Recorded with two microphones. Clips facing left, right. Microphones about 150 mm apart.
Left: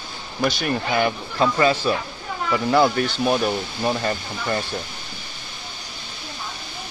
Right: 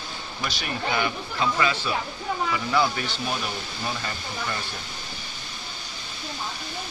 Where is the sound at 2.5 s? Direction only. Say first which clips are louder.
Left 8 dB; 50° left (ahead or behind).